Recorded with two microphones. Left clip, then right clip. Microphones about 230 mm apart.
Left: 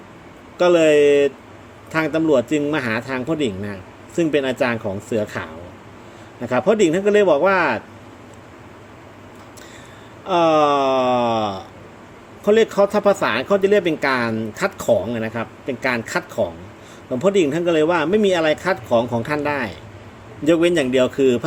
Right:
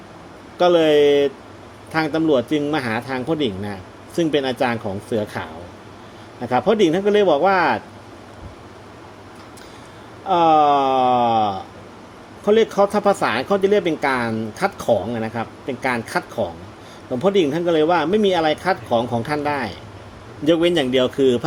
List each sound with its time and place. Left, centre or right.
0.6 s speech: centre
10.2 s speech: centre